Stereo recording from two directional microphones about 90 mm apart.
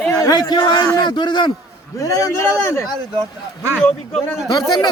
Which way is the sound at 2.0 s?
40° left (ahead or behind).